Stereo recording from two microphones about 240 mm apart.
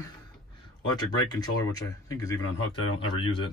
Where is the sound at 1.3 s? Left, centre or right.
Centre.